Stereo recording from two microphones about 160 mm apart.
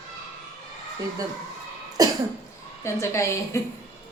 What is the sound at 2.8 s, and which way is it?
Speech, 15° left (ahead or behind).